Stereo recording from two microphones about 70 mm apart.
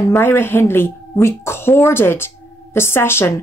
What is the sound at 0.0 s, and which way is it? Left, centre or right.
Speech, left.